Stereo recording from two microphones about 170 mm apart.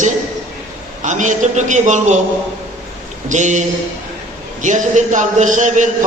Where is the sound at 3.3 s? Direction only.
45° right (ahead or behind).